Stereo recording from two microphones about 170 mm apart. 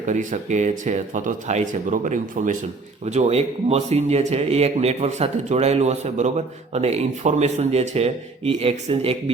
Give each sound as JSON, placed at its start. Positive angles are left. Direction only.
{"t": 0.1, "sound": "speech", "side_deg": -45}